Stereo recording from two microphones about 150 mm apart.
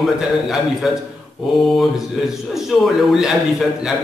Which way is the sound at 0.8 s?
Centre (ahead or behind).